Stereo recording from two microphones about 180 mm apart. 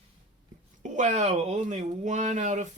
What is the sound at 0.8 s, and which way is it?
Speech, 40° right (ahead or behind).